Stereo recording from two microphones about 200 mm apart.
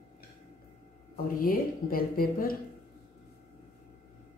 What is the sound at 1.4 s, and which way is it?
Speech, 45° left (ahead or behind).